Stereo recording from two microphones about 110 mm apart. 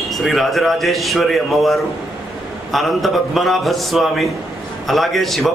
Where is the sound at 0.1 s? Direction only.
Centre (ahead or behind).